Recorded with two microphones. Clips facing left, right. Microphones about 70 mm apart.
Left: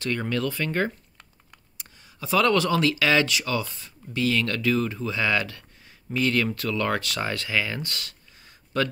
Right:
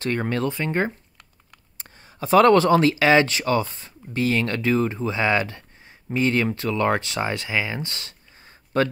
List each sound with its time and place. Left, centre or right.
0.0 s speech: right
1.8 s speech: right